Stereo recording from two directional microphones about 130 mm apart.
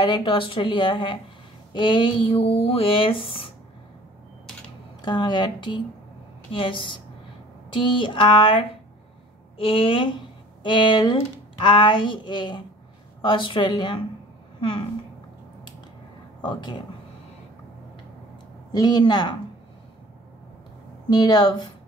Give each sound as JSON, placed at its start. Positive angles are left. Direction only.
{"t": 0.0, "sound": "a woman's voice", "side_deg": 35}
{"t": 5.0, "sound": "a woman's voice", "side_deg": 35}
{"t": 16.3, "sound": "speech", "side_deg": 35}
{"t": 18.7, "sound": "a woman's voice", "side_deg": 30}
{"t": 21.1, "sound": "a woman's voice", "side_deg": 30}